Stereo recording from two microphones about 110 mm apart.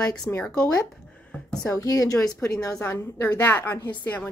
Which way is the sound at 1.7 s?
30° left (ahead or behind).